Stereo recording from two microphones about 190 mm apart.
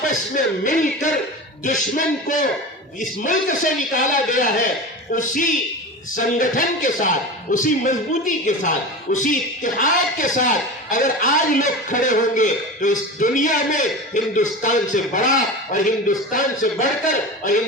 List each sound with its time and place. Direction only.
0.0 s a man's voice: 45° left (ahead or behind)